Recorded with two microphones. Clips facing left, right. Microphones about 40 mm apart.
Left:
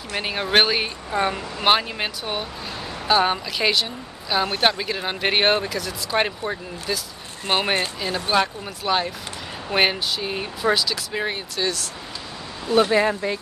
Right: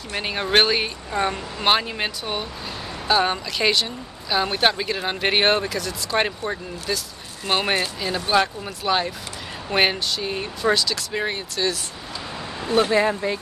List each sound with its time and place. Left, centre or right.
0.1 s speech: centre
7.5 s speech: centre
8.0 s speech: centre
12.9 s speech: centre